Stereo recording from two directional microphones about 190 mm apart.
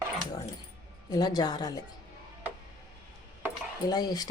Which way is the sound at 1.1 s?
20° left (ahead or behind).